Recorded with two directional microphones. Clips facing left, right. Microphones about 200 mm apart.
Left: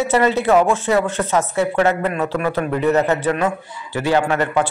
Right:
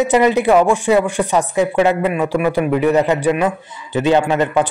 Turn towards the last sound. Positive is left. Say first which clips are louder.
# right 3 dB
turn(degrees=-20)  # may be behind; listen again after turning